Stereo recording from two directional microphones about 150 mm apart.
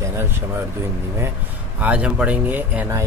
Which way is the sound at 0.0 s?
15° right (ahead or behind).